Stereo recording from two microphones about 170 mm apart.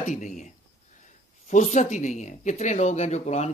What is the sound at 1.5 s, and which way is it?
Speech, 45° left (ahead or behind).